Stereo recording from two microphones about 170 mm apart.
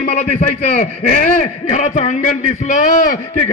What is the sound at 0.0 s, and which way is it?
A man's voice, 40° left (ahead or behind).